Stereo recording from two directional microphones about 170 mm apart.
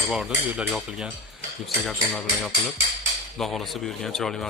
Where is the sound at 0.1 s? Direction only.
Centre (ahead or behind).